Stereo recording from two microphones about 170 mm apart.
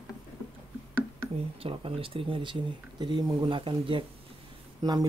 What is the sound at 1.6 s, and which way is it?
Speech, 30° right (ahead or behind).